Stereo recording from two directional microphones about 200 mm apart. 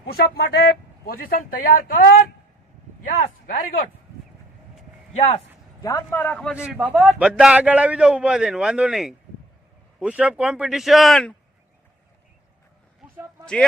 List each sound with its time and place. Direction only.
0.0 s a man's voice: 50° left (ahead or behind)
5.1 s speech: 35° left (ahead or behind)
5.8 s a man's voice: 15° left (ahead or behind)
6.7 s a man's voice: 5° right (ahead or behind)
13.4 s speech: 5° left (ahead or behind)